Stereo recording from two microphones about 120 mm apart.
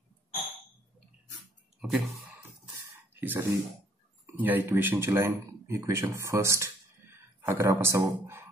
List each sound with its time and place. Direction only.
1.8 s clicking: centre (ahead or behind)
3.2 s speech: 20° right (ahead or behind)